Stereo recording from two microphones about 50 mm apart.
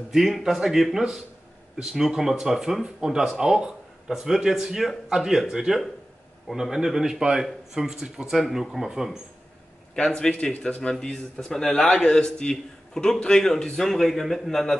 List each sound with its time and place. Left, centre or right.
0.1 s a man's voice: centre
10.0 s a man's voice: centre